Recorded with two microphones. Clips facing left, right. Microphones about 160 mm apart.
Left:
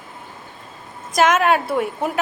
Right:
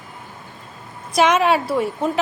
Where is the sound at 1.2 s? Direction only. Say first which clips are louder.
Even; centre (ahead or behind).